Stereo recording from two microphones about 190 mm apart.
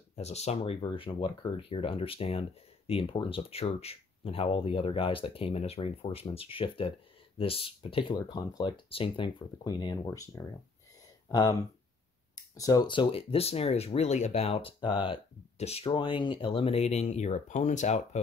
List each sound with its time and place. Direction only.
0.1 s speech: 35° left (ahead or behind)
12.5 s speech: 20° left (ahead or behind); by 18.2 s 35° left (ahead or behind)